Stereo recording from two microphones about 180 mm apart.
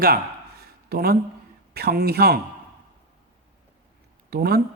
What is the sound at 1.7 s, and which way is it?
Speech, 60° right (ahead or behind).